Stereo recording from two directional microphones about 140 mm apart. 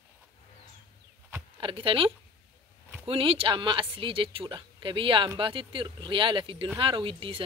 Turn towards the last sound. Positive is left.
turn(degrees=-40)  # may be behind; listen again after turning